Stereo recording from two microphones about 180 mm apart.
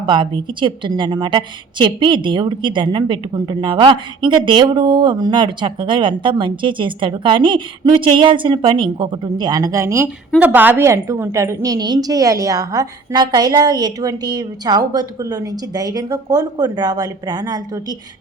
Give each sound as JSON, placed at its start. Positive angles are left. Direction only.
{"t": 0.0, "sound": "a woman's voice", "side_deg": -25}